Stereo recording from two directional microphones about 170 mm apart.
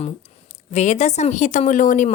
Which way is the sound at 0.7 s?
45° left (ahead or behind).